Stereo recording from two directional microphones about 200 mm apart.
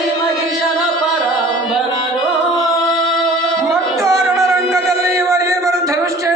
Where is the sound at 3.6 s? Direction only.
15° right (ahead or behind).